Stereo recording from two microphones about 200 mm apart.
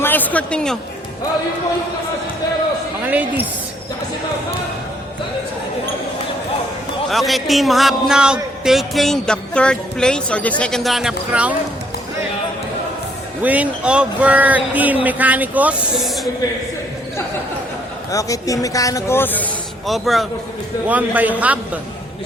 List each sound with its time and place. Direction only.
0.0 s a man's voice: 10° left (ahead or behind)
3.1 s speech: 10° right (ahead or behind)
7.1 s speech: centre (ahead or behind)
13.4 s speech: 5° right (ahead or behind)
18.1 s speech: 15° left (ahead or behind); by 21.8 s 5° right (ahead or behind)